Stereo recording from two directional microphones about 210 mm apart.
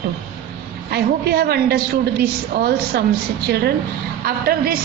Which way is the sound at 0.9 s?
50° right (ahead or behind).